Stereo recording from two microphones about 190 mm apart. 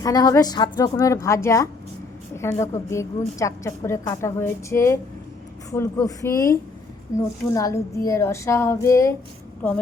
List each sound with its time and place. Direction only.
0.0 s a woman's voice: 20° left (ahead or behind)